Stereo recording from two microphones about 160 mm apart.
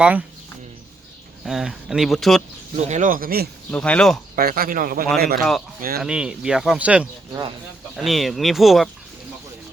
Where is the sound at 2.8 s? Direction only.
50° right (ahead or behind); by 3.5 s 70° right (ahead or behind).